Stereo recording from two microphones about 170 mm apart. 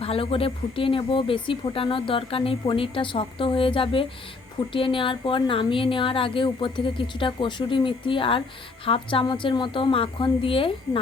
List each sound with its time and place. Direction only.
0.0 s a woman's voice: 35° left (ahead or behind)